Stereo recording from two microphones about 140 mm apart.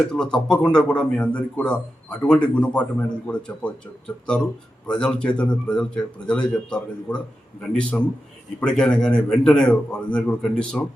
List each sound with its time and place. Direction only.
0.0 s speech: 5° left (ahead or behind)
4.9 s speech: 5° left (ahead or behind)